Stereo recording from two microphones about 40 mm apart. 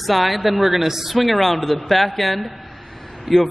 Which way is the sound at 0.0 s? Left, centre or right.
Centre.